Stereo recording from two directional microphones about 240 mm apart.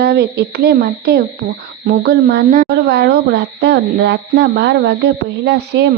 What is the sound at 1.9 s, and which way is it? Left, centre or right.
A woman's voice, right.